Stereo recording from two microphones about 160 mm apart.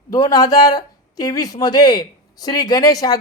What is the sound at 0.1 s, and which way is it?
Speech, 20° left (ahead or behind).